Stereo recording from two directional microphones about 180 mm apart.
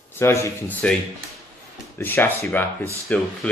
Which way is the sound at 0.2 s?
15° left (ahead or behind).